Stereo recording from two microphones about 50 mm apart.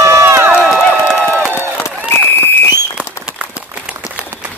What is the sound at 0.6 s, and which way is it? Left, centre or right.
Speech, centre.